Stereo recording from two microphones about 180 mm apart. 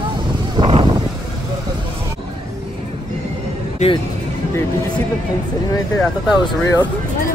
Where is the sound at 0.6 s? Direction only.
25° right (ahead or behind).